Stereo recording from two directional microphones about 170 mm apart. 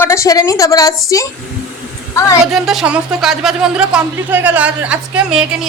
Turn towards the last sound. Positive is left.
turn(degrees=-5)  # may be behind; listen again after turning